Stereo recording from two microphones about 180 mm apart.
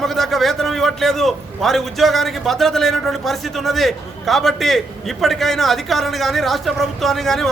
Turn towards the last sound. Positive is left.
turn(degrees=0)  # may be behind; listen again after turning